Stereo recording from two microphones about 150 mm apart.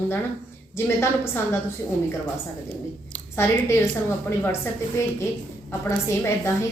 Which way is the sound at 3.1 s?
15° left (ahead or behind).